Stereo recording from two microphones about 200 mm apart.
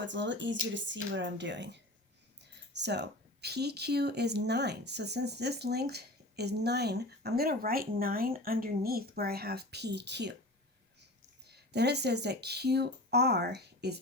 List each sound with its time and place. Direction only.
0.0 s speech: 65° right (ahead or behind)
11.4 s speech: 55° right (ahead or behind)